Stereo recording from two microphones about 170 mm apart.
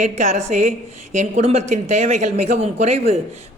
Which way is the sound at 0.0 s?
40° right (ahead or behind).